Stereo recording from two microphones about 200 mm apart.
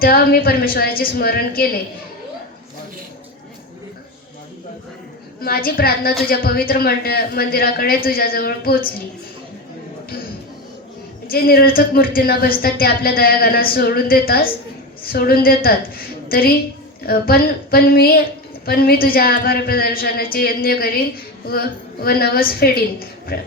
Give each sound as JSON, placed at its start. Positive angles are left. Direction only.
{"t": 0.0, "sound": "speech", "side_deg": 50}
{"t": 5.4, "sound": "speech", "side_deg": 50}
{"t": 11.3, "sound": "speech", "side_deg": 50}
{"t": 17.0, "sound": "speech", "side_deg": 50}